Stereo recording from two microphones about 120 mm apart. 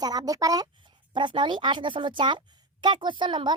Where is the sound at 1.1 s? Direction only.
40° right (ahead or behind).